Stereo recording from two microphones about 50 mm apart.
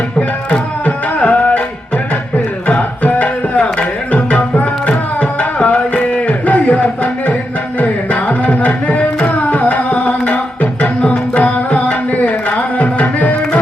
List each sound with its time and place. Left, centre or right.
0.2 s tabla: left
2.6 s tabla: left